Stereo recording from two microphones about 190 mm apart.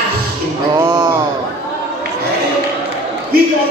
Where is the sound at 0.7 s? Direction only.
20° right (ahead or behind).